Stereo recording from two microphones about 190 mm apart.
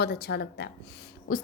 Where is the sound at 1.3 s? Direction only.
50° left (ahead or behind).